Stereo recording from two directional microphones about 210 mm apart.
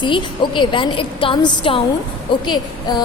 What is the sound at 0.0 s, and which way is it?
A woman's voice, 20° left (ahead or behind).